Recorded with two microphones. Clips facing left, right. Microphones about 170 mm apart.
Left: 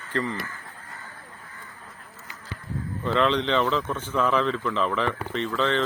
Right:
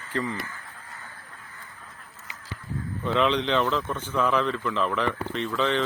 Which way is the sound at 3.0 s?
5° right (ahead or behind).